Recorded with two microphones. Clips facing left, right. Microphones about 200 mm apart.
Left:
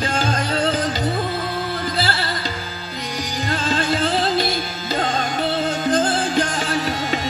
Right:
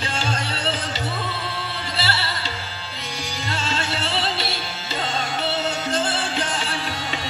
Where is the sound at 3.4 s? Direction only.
45° left (ahead or behind).